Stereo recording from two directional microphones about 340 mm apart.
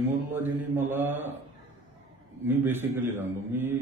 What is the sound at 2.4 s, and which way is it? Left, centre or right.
A man's voice, centre.